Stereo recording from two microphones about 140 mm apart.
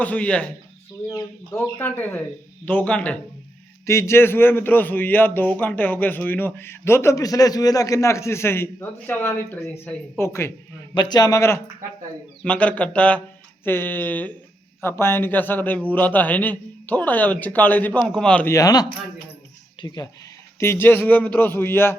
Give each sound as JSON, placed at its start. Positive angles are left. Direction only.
{"t": 0.0, "sound": "a man's voice", "side_deg": 10}
{"t": 1.1, "sound": "a man's voice", "side_deg": 25}
{"t": 1.8, "sound": "a man's voice", "side_deg": 15}
{"t": 3.8, "sound": "a man's voice", "side_deg": 20}
{"t": 10.9, "sound": "a man's voice", "side_deg": 30}
{"t": 18.5, "sound": "a man's voice", "side_deg": 25}
{"t": 20.6, "sound": "a man's voice", "side_deg": 15}